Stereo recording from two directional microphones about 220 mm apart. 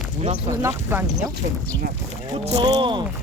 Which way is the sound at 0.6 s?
10° right (ahead or behind).